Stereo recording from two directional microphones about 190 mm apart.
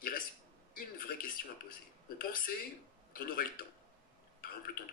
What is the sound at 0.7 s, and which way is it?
Speech, 50° left (ahead or behind).